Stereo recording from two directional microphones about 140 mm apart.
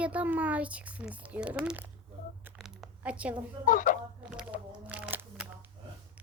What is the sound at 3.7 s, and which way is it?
Speech, 70° left (ahead or behind).